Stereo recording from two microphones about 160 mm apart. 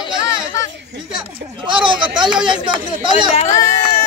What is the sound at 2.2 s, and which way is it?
Speech, 5° right (ahead or behind).